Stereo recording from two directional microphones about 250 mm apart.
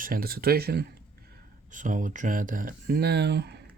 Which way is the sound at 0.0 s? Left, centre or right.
Right.